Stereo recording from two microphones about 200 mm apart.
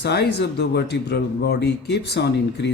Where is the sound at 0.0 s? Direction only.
55° left (ahead or behind).